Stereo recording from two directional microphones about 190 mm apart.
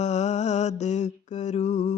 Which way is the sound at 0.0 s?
35° left (ahead or behind).